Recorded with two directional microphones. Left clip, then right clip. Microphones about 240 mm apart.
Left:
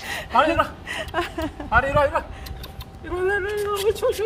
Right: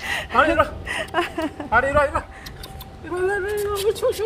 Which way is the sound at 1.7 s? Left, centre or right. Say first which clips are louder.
Right 1 dB; left.